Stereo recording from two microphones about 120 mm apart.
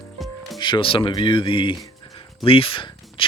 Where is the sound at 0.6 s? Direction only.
45° left (ahead or behind).